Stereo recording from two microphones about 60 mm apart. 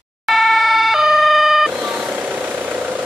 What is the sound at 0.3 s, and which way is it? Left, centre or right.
Emergency vehicle, centre.